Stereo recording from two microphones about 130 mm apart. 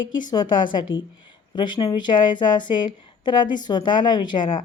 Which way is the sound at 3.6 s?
35° left (ahead or behind).